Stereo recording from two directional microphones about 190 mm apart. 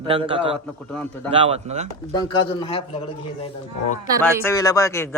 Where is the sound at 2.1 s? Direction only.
20° left (ahead or behind).